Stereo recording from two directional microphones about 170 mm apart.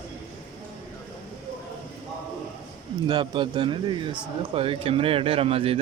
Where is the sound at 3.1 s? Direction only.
30° right (ahead or behind).